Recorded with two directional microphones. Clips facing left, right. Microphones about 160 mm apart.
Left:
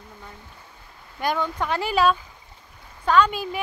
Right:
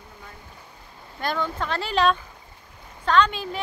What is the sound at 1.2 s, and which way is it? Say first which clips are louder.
Speech: left 2 dB; 10° left (ahead or behind).